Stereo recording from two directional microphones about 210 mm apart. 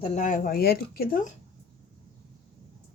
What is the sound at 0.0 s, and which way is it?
Speech, 35° left (ahead or behind).